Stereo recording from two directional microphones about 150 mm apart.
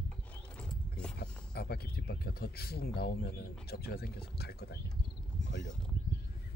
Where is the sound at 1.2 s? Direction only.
90° left.